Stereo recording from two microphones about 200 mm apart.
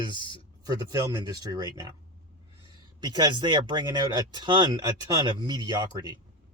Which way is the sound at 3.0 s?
20° right (ahead or behind).